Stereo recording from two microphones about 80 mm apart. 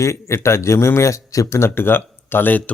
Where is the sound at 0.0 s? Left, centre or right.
Left.